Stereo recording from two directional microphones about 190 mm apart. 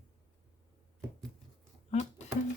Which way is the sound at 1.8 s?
35° left (ahead or behind).